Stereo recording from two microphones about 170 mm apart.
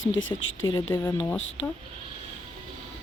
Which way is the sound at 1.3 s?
90° left.